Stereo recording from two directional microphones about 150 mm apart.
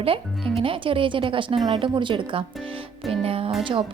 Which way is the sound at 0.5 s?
35° right (ahead or behind).